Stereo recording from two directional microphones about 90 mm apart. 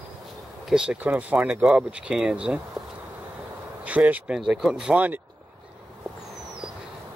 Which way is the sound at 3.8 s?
15° right (ahead or behind).